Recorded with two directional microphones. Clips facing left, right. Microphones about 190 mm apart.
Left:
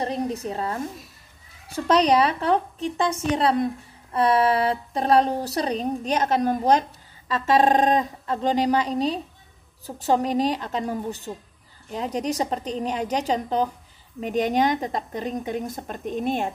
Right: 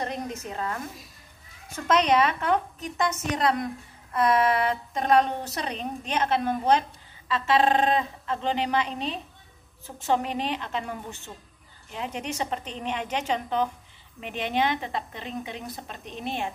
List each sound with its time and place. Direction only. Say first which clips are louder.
0.0 s a woman's voice: left 6 dB; 35° left (ahead or behind)